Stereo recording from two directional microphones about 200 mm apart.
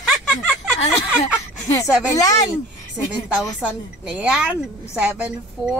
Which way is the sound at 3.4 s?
5° right (ahead or behind).